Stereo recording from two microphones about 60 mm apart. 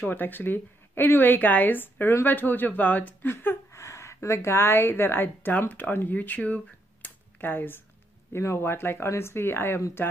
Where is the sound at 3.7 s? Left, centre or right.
Left.